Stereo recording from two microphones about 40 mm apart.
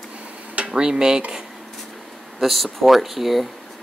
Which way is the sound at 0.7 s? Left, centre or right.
Centre.